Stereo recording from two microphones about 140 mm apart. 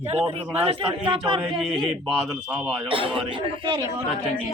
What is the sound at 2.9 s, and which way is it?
Speech, 40° right (ahead or behind).